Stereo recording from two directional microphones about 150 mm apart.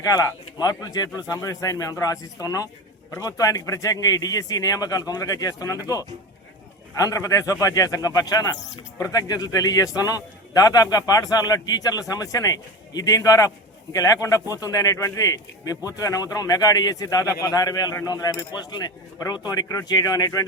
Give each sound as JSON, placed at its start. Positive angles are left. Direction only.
{"t": 0.0, "sound": "a man's voice", "side_deg": 25}
{"t": 7.0, "sound": "a man's voice", "side_deg": 20}